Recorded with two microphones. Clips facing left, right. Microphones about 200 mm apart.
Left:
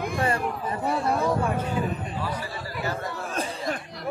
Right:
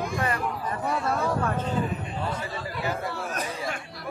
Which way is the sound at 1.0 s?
10° left (ahead or behind).